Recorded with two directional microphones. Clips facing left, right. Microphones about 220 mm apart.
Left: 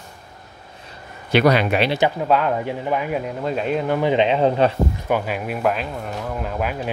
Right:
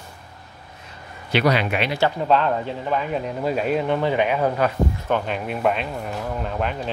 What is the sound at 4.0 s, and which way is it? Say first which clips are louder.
Speech: left 3 dB; 20° left (ahead or behind).